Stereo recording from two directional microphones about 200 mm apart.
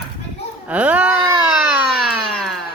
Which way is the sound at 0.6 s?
5° right (ahead or behind).